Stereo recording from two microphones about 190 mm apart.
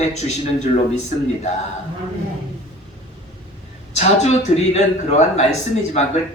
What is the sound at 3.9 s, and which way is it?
A man's voice, 35° left (ahead or behind).